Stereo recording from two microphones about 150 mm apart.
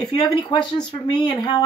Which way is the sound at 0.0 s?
30° left (ahead or behind).